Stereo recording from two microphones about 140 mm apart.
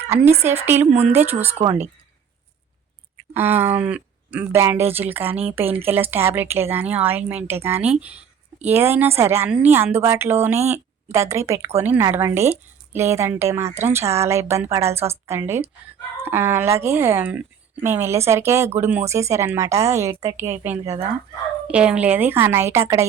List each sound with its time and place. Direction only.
0.6 s a woman's voice: 15° right (ahead or behind)
1.6 s speech: 45° right (ahead or behind)
3.3 s a woman's voice: 15° right (ahead or behind)
13.7 s speech: 50° right (ahead or behind)
13.9 s a woman's voice: 20° right (ahead or behind)
20.8 s speech: 45° right (ahead or behind)
21.7 s a woman's voice: 10° right (ahead or behind)